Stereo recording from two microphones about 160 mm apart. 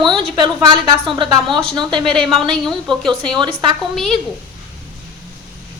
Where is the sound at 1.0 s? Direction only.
30° right (ahead or behind).